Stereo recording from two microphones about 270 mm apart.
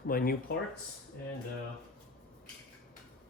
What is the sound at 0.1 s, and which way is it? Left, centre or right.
Speech, left.